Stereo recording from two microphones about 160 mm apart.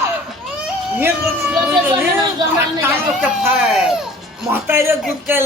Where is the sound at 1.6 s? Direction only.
10° right (ahead or behind).